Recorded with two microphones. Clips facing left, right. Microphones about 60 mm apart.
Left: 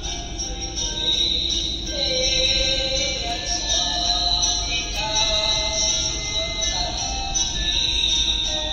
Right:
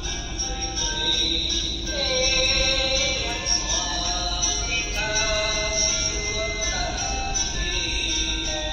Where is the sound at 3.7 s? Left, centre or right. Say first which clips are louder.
Left 4 dB; right.